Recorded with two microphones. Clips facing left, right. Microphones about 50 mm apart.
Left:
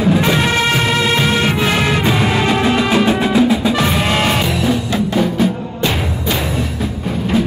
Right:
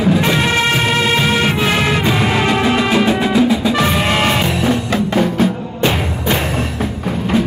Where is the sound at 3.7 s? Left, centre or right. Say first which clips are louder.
Right 1 dB; centre.